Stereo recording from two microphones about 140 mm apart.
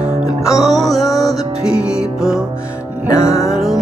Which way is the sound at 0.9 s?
25° left (ahead or behind).